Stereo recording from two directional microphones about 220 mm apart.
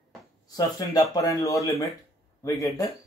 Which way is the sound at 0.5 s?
15° left (ahead or behind).